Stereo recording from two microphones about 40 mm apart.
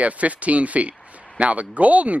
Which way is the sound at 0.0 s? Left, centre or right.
Right.